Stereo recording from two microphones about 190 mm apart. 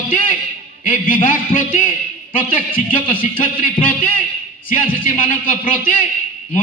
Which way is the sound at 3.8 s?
45° left (ahead or behind).